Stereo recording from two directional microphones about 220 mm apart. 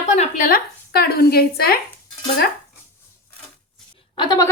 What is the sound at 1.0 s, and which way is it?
Speech, 45° left (ahead or behind).